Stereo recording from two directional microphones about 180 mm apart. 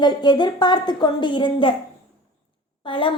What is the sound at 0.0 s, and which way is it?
A woman's voice, 25° left (ahead or behind).